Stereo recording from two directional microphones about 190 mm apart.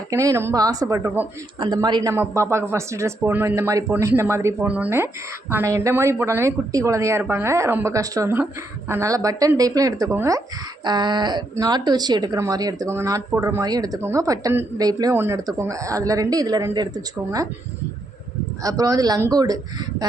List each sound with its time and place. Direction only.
0.1 s speech: 15° right (ahead or behind)
1.5 s speech: 25° right (ahead or behind)
18.6 s speech: 20° right (ahead or behind)